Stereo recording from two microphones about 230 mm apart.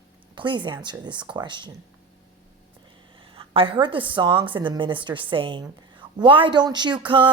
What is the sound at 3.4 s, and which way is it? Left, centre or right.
A woman's voice, right.